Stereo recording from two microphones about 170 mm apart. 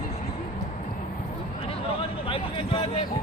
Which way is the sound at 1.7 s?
30° left (ahead or behind).